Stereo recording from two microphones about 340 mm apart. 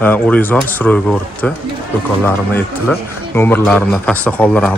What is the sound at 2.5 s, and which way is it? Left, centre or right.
Speech, centre.